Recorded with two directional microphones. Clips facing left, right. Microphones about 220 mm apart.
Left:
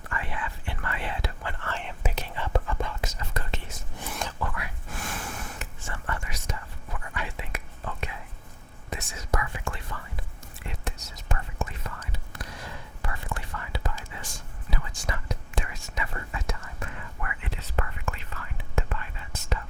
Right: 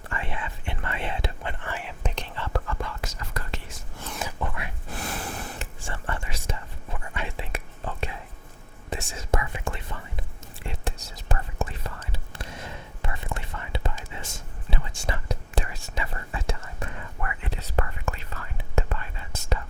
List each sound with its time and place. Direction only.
0.1 s whispering: 25° right (ahead or behind)
2.0 s whispering: 10° left (ahead or behind)
4.3 s a sound: 20° right (ahead or behind)
4.9 s whispering: 35° right (ahead or behind)